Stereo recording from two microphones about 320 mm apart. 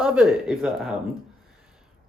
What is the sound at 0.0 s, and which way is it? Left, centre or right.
Speech, centre.